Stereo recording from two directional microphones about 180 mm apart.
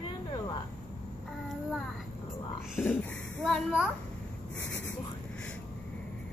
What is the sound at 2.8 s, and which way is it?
A child's voice, 10° left (ahead or behind).